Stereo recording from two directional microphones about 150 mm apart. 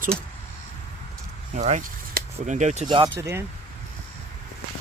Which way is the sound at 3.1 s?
15° right (ahead or behind).